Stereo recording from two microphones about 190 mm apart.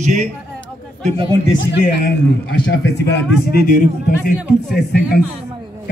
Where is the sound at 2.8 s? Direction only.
60° left (ahead or behind).